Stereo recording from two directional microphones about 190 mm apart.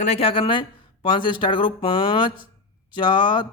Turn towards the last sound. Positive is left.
turn(degrees=25)  # may be behind; listen again after turning